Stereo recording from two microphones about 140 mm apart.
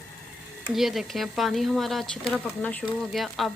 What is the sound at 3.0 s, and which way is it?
Speech, centre (ahead or behind).